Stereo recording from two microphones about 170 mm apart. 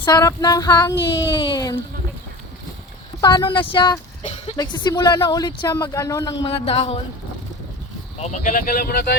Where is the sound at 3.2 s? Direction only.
25° left (ahead or behind).